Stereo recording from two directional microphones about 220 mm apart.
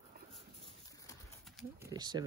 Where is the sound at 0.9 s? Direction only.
15° left (ahead or behind).